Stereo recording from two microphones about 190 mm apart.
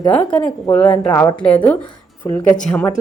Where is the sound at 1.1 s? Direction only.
20° left (ahead or behind).